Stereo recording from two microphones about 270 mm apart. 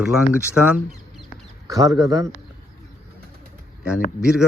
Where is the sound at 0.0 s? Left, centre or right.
Centre.